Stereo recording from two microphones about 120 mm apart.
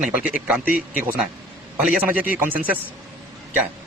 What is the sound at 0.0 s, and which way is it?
Speech, 10° right (ahead or behind).